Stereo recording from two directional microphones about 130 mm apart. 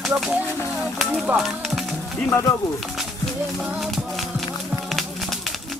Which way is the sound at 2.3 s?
20° left (ahead or behind).